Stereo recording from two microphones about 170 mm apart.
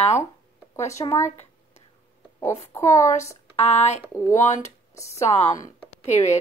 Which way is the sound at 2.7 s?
15° left (ahead or behind).